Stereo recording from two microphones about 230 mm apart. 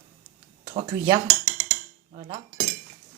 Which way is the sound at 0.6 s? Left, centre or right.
Right.